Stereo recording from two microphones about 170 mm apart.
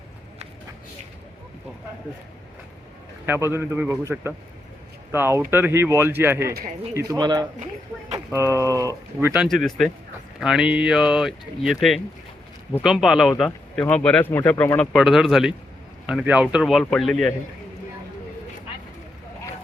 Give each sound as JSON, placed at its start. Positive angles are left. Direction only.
{"t": 3.2, "sound": "speech", "side_deg": -15}
{"t": 9.3, "sound": "speech", "side_deg": -5}
{"t": 14.8, "sound": "speech", "side_deg": 0}